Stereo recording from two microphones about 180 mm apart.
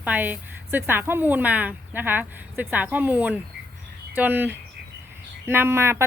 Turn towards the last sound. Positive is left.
turn(degrees=-15)  # may be behind; listen again after turning